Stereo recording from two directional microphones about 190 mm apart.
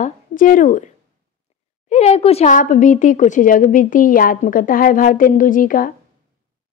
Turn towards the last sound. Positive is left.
turn(degrees=45)  # may be behind; listen again after turning